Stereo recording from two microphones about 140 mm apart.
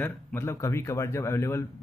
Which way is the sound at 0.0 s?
15° left (ahead or behind).